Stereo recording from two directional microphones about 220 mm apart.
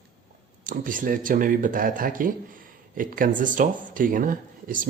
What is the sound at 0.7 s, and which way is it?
Speech, 35° right (ahead or behind).